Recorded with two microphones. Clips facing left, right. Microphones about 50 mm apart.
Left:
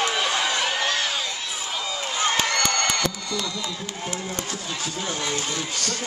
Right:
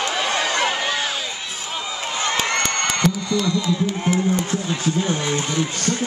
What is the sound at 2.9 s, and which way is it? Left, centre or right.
Music, right.